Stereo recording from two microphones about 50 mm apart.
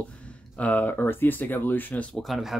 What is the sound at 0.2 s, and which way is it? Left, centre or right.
Speech, left.